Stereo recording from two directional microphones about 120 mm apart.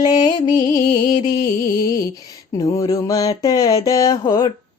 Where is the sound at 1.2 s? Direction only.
70° left (ahead or behind).